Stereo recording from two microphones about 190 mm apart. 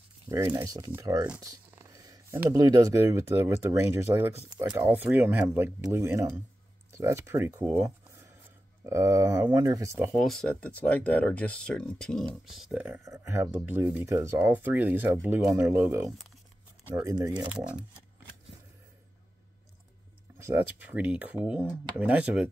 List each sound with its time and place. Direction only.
0.3 s speech: 15° right (ahead or behind)
1.4 s a sound: 15° right (ahead or behind)
2.5 s speech: 20° right (ahead or behind)
10.1 s speech: centre (ahead or behind); by 17.3 s 20° right (ahead or behind)
17.3 s speech: 5° right (ahead or behind)
20.3 s speech: 15° right (ahead or behind)